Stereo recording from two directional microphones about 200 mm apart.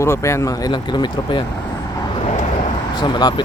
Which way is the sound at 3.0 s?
20° left (ahead or behind).